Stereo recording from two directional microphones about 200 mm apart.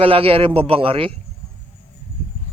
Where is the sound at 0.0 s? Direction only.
30° right (ahead or behind).